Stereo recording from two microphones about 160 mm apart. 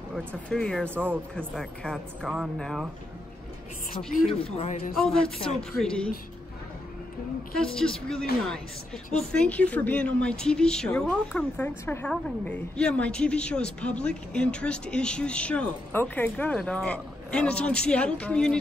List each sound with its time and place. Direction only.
0.5 s a woman's voice: 5° left (ahead or behind)
0.8 s speech: 15° right (ahead or behind)
1.3 s a woman's voice: 5° left (ahead or behind)
4.6 s a man's voice: 50° left (ahead or behind)
4.9 s a woman's voice: 5° left (ahead or behind)
7.5 s a woman's voice: 5° left (ahead or behind)